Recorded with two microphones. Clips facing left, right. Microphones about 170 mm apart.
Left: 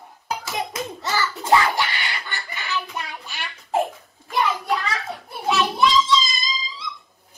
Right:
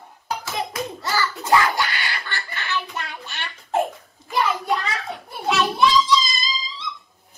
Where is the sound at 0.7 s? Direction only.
20° left (ahead or behind).